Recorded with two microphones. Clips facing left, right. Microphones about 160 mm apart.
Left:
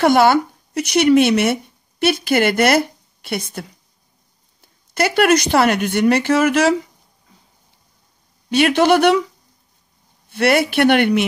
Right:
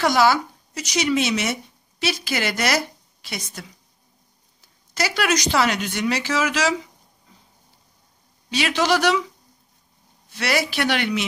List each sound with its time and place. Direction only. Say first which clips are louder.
0.0 s speech: left 5 dB; 55° left (ahead or behind)
8.5 s a man's voice: left 7 dB; 55° left (ahead or behind)
10.3 s a man's voice: left 8 dB; 55° left (ahead or behind)